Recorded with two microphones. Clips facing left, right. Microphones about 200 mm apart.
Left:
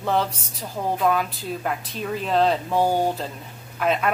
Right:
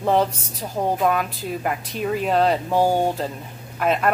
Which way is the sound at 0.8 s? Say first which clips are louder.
Right 4 dB; 30° right (ahead or behind).